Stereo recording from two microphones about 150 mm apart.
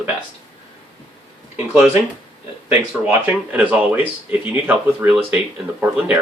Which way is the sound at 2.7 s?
10° right (ahead or behind).